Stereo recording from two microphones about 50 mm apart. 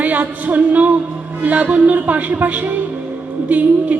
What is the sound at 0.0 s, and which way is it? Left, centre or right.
Music, right.